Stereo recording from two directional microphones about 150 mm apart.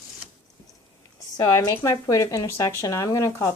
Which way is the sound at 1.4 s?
25° left (ahead or behind).